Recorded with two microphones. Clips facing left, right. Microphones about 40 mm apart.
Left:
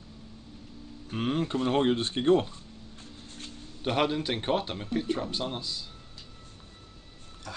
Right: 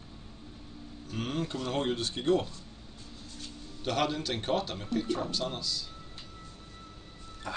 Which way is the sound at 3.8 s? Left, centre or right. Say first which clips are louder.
Left 3 dB; left.